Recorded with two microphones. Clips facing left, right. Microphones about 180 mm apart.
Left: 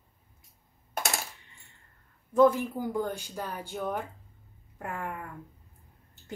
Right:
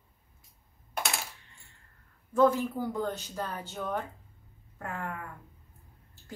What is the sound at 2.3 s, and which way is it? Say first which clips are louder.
A woman's voice: left 2 dB; 15° left (ahead or behind).